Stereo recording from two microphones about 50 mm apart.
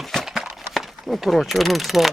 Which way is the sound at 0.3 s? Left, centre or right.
Centre.